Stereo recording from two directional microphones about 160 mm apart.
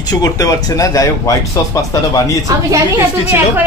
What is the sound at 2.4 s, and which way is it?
A woman's voice, 20° right (ahead or behind).